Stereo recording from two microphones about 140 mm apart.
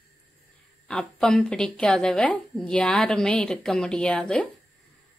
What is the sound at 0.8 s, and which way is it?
A woman's voice, 5° left (ahead or behind).